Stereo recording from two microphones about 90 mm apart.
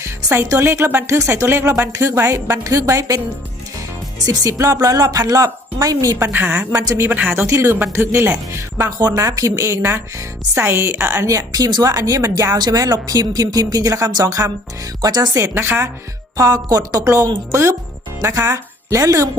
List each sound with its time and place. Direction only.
0.4 s a woman's voice: 30° right (ahead or behind)
4.3 s a woman's voice: 35° right (ahead or behind)
6.1 s speech: 25° right (ahead or behind)
6.7 s speech: 35° right (ahead or behind)
7.4 s a woman's voice: 30° right (ahead or behind)
11.3 s a woman's voice: 45° right (ahead or behind)
15.4 s speech: 30° right (ahead or behind)
16.4 s a woman's voice: 45° right (ahead or behind)